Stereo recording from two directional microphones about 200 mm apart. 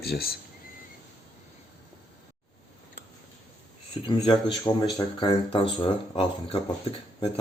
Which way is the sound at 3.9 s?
25° left (ahead or behind).